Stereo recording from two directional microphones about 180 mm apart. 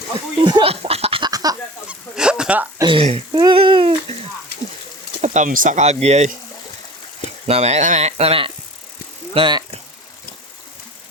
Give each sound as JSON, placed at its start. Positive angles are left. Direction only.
{"t": 0.4, "sound": "a sound", "side_deg": -30}
{"t": 1.9, "sound": "honk", "side_deg": -5}
{"t": 2.8, "sound": "speech", "side_deg": -30}
{"t": 3.3, "sound": "babbling", "side_deg": -25}
{"t": 5.2, "sound": "speech", "side_deg": -40}
{"t": 7.4, "sound": "speech", "side_deg": -35}